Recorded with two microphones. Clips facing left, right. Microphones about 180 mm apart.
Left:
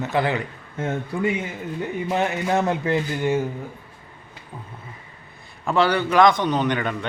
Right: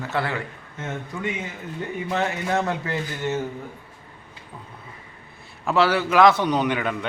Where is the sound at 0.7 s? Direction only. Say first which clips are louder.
Left 6 dB; 30° left (ahead or behind).